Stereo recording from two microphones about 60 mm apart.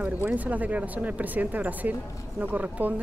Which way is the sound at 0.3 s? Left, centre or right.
Right.